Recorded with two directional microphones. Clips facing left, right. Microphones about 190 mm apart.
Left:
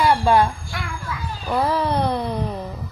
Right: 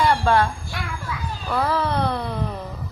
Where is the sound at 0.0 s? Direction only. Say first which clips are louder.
Left 2 dB; 10° left (ahead or behind).